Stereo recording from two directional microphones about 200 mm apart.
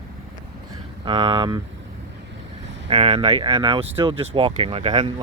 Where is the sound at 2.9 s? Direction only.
30° right (ahead or behind).